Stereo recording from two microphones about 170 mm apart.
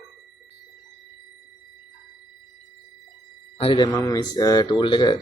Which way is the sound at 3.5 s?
30° left (ahead or behind).